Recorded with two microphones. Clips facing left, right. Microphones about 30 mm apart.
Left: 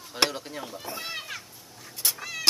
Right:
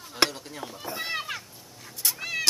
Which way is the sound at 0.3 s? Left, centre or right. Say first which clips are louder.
Left 2 dB; centre.